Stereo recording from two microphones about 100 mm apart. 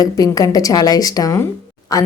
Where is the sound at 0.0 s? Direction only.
35° left (ahead or behind).